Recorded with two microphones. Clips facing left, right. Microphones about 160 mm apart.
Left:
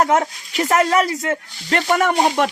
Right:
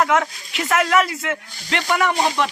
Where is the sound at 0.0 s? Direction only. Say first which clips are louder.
Left 2 dB; 40° left (ahead or behind).